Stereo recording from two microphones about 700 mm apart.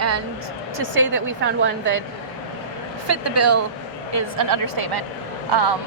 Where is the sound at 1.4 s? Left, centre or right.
Centre.